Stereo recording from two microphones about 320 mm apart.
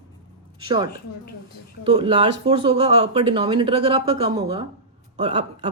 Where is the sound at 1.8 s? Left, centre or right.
Centre.